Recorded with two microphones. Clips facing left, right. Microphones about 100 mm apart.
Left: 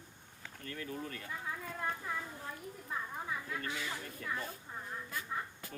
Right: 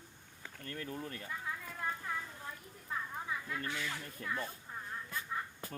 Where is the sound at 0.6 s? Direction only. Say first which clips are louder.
Even; 30° right (ahead or behind).